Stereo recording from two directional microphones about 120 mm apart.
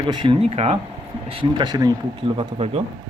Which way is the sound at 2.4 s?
55° right (ahead or behind).